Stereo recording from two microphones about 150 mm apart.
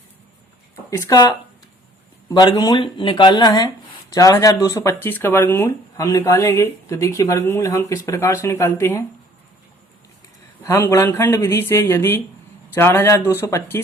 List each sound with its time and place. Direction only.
0.9 s speech: 20° left (ahead or behind)
10.6 s speech: 20° left (ahead or behind)